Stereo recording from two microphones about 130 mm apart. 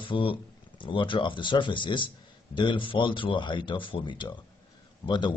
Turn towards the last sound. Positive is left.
turn(degrees=35)  # may be behind; listen again after turning